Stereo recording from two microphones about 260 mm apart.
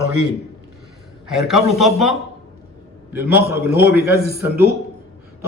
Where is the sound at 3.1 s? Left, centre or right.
Centre.